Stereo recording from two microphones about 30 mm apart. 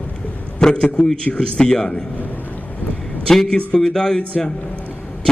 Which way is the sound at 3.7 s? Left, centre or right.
Centre.